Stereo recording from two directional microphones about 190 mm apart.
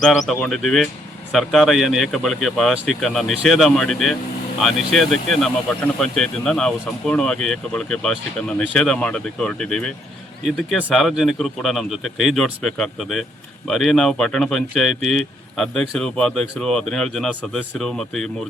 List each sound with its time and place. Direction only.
0.0 s speech: centre (ahead or behind)